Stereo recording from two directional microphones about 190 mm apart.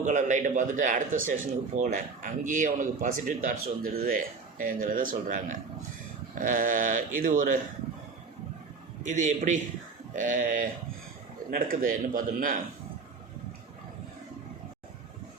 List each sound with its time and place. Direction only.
0.0 s a man's voice: 40° right (ahead or behind)
9.0 s a man's voice: 40° right (ahead or behind)